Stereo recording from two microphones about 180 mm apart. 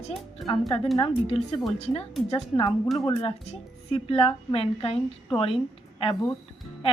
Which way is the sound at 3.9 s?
30° left (ahead or behind).